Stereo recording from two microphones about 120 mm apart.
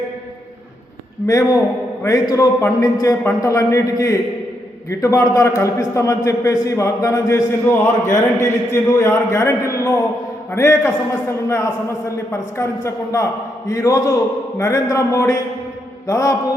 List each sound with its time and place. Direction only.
1.3 s a man's voice: 30° left (ahead or behind)